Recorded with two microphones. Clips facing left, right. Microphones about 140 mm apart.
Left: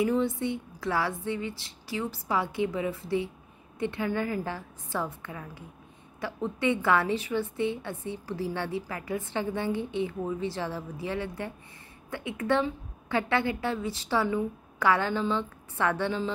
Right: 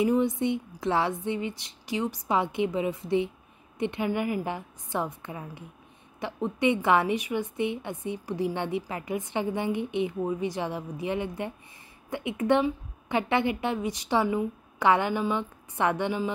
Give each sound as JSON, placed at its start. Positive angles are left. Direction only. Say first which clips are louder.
{"t": 0.0, "sound": "a woman's voice", "louder": "right 2 dB", "side_deg": -20}